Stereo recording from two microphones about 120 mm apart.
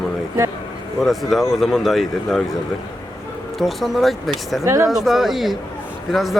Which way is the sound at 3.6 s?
Centre (ahead or behind).